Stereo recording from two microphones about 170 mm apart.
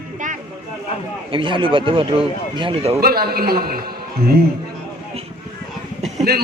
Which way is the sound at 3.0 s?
65° right (ahead or behind).